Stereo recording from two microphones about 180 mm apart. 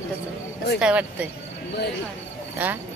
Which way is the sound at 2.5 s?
10° right (ahead or behind).